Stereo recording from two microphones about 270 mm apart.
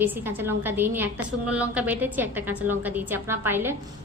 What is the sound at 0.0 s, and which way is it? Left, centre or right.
A woman's voice, centre.